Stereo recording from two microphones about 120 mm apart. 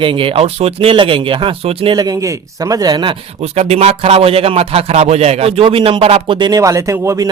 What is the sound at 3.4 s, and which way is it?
A man's voice, 65° right (ahead or behind).